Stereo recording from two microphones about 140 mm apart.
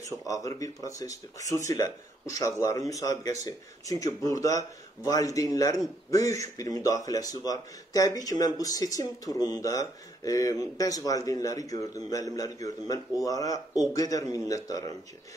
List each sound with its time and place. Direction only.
0.3 s a man's voice: 25° left (ahead or behind)